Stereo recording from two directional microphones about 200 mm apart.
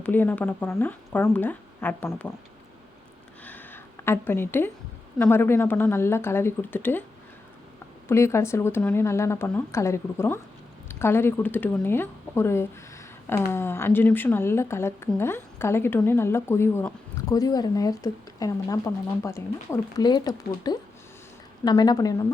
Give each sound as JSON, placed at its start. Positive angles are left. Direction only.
{"t": 0.0, "sound": "speech", "side_deg": 10}
{"t": 3.4, "sound": "a sound", "side_deg": 10}
{"t": 5.2, "sound": "speech", "side_deg": 10}
{"t": 8.0, "sound": "speech", "side_deg": 15}